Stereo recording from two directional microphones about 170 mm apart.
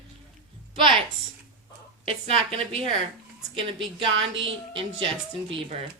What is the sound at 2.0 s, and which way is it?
Speech, 35° right (ahead or behind).